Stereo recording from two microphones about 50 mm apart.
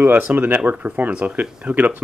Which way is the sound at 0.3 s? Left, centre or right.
Right.